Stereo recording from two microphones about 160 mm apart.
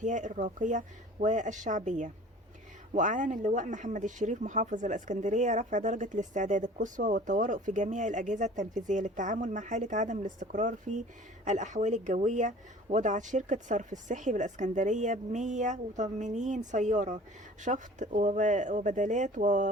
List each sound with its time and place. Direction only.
0.0 s speech: 50° right (ahead or behind)